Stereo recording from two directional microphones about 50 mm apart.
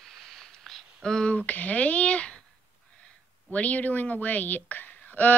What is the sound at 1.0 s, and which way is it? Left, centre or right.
Speech, centre.